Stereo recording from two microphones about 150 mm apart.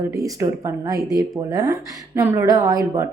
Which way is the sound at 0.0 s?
20° right (ahead or behind).